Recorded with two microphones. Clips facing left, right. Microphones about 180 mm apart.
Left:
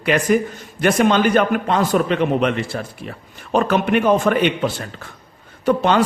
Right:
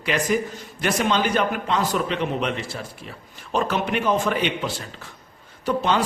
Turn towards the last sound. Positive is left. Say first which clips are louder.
# left 6 dB
turn(degrees=60)  # may be behind; listen again after turning